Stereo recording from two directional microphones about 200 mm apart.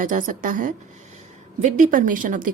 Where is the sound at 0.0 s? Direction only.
40° right (ahead or behind).